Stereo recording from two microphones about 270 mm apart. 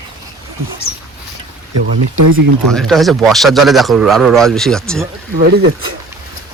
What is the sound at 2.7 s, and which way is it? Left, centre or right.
Speech, centre.